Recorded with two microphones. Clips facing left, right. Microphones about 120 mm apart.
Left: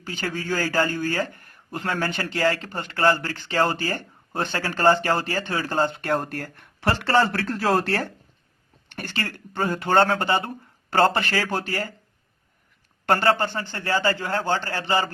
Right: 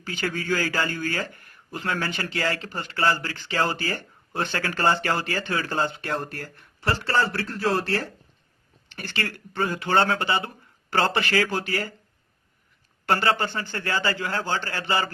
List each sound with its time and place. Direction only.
0.1 s a man's voice: 40° left (ahead or behind)
6.7 s a man's voice: 65° left (ahead or behind); by 11.9 s 45° left (ahead or behind)
13.1 s speech: 45° left (ahead or behind)